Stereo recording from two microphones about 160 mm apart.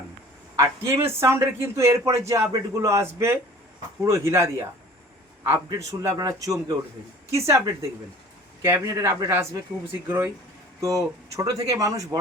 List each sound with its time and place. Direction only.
0.5 s a man's voice: 20° right (ahead or behind)